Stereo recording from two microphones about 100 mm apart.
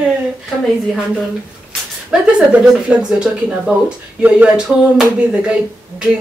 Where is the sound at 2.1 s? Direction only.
5° right (ahead or behind).